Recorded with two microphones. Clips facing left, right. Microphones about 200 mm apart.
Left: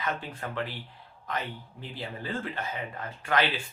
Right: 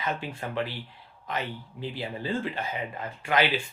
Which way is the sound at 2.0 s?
20° right (ahead or behind).